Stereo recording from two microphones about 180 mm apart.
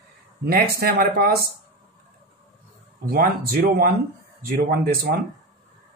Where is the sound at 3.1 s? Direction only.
55° right (ahead or behind).